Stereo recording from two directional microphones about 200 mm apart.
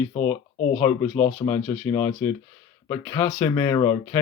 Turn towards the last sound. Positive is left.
turn(degrees=15)  # may be behind; listen again after turning